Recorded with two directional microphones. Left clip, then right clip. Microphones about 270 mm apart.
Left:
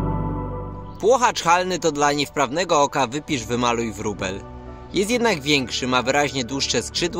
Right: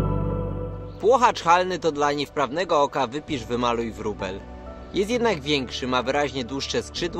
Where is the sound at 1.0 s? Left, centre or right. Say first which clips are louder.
Left 1 dB; left.